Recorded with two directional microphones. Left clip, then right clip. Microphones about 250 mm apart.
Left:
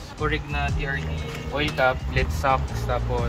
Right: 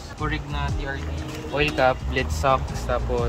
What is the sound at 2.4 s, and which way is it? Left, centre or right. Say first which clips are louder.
Speech: right 2 dB; right.